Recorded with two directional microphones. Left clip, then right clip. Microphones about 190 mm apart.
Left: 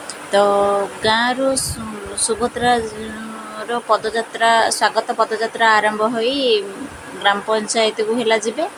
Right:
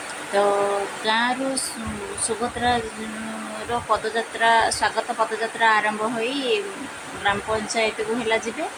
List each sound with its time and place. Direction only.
0.3 s speech: 20° left (ahead or behind)